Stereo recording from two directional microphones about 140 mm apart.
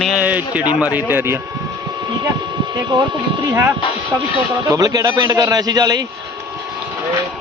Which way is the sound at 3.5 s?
15° right (ahead or behind).